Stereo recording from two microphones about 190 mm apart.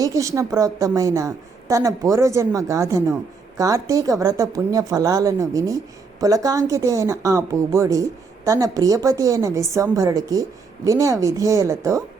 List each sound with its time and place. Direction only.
0.0 s speech: 15° right (ahead or behind)